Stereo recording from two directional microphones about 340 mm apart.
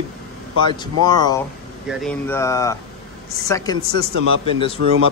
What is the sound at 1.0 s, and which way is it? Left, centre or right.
Speech, centre.